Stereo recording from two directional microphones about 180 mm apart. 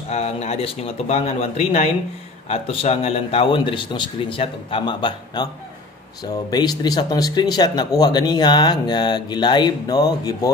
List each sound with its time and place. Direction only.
0.1 s speech: 35° left (ahead or behind)
6.5 s speech: 20° left (ahead or behind)